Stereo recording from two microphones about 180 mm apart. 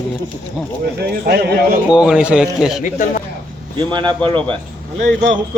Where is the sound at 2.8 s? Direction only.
45° left (ahead or behind).